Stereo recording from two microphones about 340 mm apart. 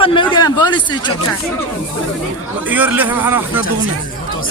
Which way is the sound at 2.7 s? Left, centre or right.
Centre.